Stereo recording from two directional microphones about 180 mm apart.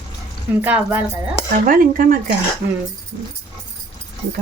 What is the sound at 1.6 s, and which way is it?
Speech, 50° right (ahead or behind).